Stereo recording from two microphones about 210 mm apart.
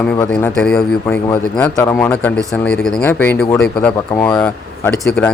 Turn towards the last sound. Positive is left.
turn(degrees=5)  # may be behind; listen again after turning